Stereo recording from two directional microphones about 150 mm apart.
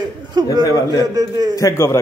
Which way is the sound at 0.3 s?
30° right (ahead or behind).